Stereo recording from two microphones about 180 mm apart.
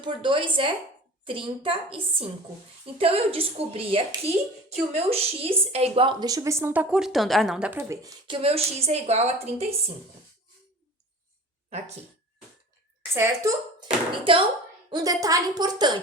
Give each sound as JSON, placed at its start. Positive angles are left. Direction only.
{"t": 0.0, "sound": "a woman's voice", "side_deg": -25}
{"t": 8.3, "sound": "a woman's voice", "side_deg": -35}
{"t": 13.1, "sound": "speech", "side_deg": -15}
{"t": 14.8, "sound": "a woman's voice", "side_deg": -20}